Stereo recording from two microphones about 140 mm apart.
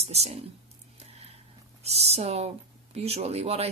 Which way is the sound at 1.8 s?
50° right (ahead or behind).